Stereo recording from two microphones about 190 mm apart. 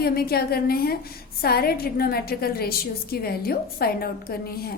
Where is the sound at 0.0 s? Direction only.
55° left (ahead or behind).